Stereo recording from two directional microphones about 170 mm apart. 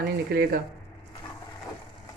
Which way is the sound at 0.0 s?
60° right (ahead or behind).